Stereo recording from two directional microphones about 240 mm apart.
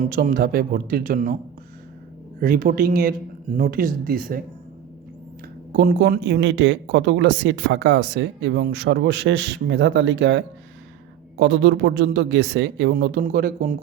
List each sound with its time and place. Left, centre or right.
0.0 s speech: right
2.4 s speech: right
5.7 s speech: right